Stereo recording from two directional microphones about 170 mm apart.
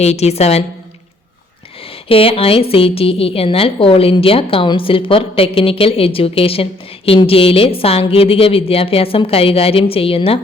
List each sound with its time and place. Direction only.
0.0 s a woman's voice: 40° left (ahead or behind)
2.0 s a woman's voice: 35° left (ahead or behind)